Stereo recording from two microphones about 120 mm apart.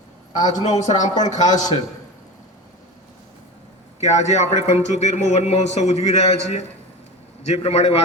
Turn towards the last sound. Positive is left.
turn(degrees=60)  # may be behind; listen again after turning